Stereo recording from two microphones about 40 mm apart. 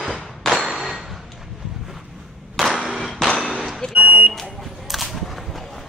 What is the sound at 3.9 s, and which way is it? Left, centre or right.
Smoke detector, right.